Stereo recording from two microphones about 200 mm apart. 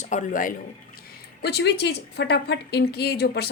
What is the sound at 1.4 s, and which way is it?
A woman's voice, 55° left (ahead or behind).